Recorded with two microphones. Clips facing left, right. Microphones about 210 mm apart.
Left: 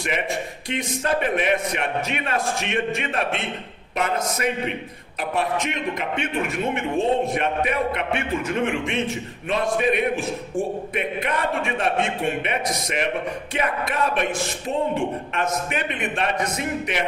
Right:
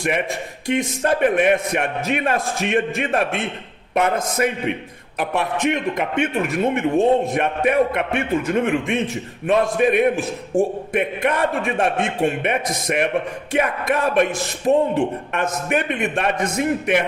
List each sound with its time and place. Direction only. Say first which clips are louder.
0.7 s a man's voice: right 5 dB; 50° right (ahead or behind)